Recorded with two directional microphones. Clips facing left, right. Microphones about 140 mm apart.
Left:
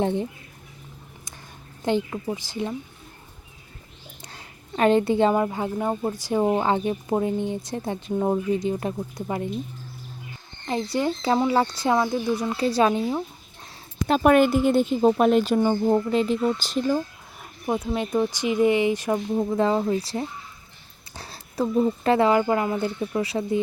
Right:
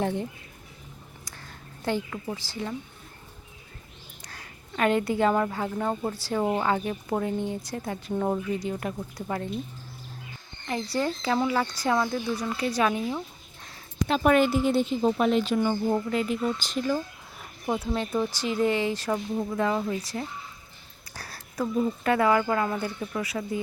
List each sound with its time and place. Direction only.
0.0 s speech: 20° left (ahead or behind)
1.8 s speech: 20° left (ahead or behind)
4.2 s a sound: 25° left (ahead or behind)
5.3 s speech: 20° left (ahead or behind)
10.7 s speech: 20° left (ahead or behind)
14.1 s speech: 45° left (ahead or behind)
15.5 s speech: 30° left (ahead or behind)
17.7 s speech: 15° left (ahead or behind)
19.3 s speech: 30° left (ahead or behind)